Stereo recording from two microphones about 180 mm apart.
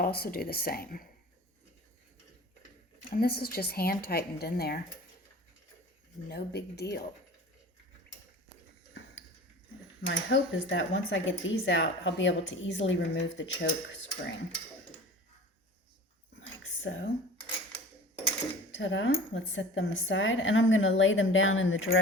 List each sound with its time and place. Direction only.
0.0 s a woman's voice: 55° left (ahead or behind)
3.0 s a woman's voice: 55° left (ahead or behind)
6.2 s a woman's voice: 60° left (ahead or behind)
10.1 s speech: 90° left
16.8 s speech: 90° left
18.8 s speech: 90° left